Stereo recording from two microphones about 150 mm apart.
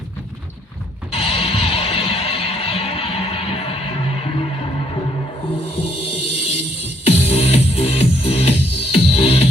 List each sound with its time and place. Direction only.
1.1 s music: 40° left (ahead or behind)